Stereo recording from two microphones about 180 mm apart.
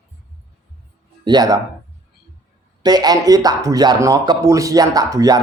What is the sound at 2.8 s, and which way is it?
Speech, 20° right (ahead or behind).